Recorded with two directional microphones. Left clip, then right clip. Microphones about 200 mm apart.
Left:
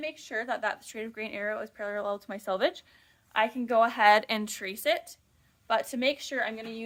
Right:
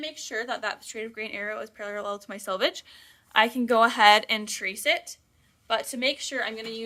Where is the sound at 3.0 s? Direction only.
40° right (ahead or behind).